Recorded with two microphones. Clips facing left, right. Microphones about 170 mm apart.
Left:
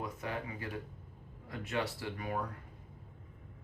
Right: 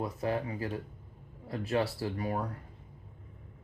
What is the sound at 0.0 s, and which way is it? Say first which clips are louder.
Speech: right 7 dB; 35° right (ahead or behind).